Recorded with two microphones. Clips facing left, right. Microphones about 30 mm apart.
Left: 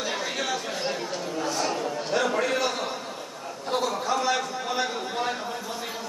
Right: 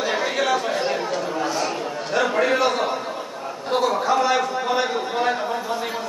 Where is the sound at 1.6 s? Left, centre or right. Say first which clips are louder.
Right 2 dB; centre.